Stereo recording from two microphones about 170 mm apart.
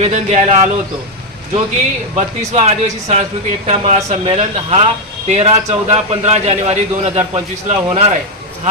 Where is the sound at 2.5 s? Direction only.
40° right (ahead or behind).